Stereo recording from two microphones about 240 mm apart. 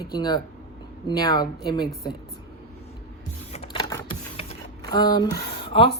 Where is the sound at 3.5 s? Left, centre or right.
Left.